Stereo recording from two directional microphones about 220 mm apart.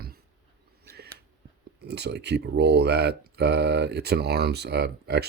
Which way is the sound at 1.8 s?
50° right (ahead or behind).